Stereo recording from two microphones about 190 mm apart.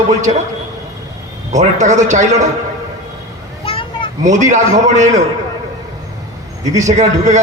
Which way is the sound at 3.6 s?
30° left (ahead or behind).